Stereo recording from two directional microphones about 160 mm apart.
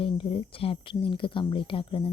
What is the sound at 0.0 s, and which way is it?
Speech, 35° left (ahead or behind).